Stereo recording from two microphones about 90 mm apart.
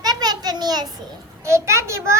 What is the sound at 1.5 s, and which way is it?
Speech, 30° right (ahead or behind).